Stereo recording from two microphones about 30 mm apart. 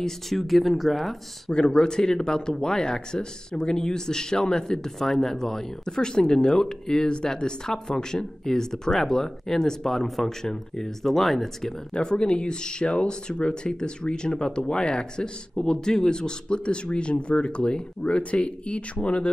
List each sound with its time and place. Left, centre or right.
0.3 s speech: centre
1.5 s speech: left
4.9 s speech: centre
11.9 s speech: left